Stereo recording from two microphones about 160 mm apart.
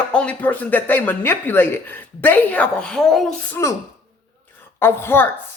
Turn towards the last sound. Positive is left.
turn(degrees=15)  # may be behind; listen again after turning